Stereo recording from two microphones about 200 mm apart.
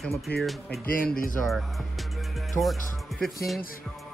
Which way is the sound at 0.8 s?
45° left (ahead or behind).